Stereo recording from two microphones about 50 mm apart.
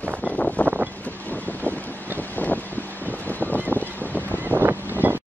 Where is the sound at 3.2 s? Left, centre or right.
Left.